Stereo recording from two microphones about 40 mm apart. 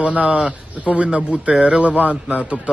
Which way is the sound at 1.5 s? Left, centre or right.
Right.